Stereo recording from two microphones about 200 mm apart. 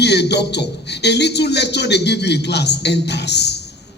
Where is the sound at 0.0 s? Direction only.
55° left (ahead or behind).